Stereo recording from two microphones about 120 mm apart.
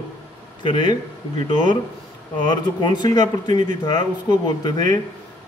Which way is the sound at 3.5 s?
90° right.